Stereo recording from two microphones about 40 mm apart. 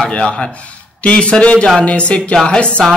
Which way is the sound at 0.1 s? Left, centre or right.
Left.